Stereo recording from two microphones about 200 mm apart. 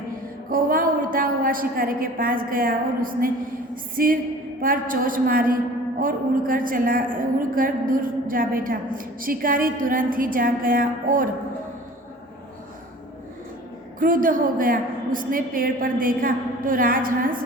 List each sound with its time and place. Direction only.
0.5 s a woman's voice: 45° right (ahead or behind)
14.0 s a woman's voice: 45° right (ahead or behind)